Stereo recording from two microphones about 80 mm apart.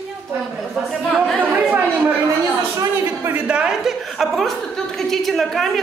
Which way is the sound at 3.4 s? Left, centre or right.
Centre.